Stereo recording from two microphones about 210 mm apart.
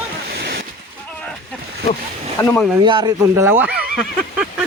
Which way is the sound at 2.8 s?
20° right (ahead or behind).